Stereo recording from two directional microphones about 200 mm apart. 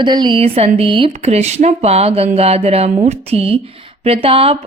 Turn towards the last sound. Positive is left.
turn(degrees=-30)  # may be behind; listen again after turning